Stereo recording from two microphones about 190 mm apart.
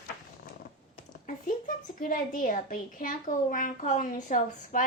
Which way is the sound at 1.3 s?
45° left (ahead or behind).